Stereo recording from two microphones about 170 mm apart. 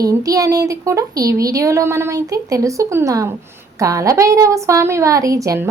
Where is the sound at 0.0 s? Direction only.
20° right (ahead or behind).